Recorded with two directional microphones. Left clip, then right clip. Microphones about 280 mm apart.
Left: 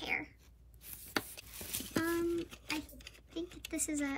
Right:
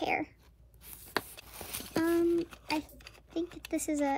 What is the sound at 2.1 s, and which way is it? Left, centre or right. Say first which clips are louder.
Speech: right 9 dB; centre.